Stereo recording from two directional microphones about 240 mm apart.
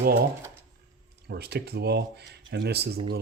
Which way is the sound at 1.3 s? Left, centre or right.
Right.